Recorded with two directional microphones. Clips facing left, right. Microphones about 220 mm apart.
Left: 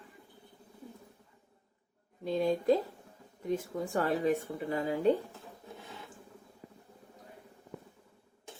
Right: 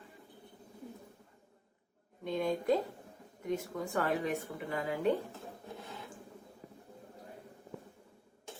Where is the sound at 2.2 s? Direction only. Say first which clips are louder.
Left 4 dB; 30° left (ahead or behind).